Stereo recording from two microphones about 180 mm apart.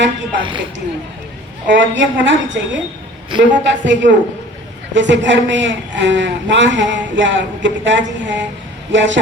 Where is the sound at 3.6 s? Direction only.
85° right.